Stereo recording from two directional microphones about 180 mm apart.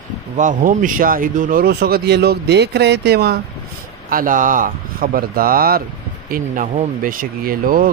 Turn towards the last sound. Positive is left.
turn(degrees=-50)  # may be behind; listen again after turning